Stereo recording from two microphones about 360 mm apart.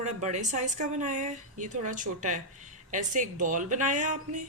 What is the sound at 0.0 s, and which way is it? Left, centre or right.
A woman's voice, centre.